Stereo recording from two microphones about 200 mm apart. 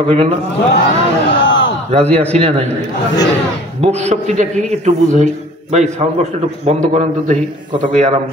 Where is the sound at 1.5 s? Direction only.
70° left (ahead or behind).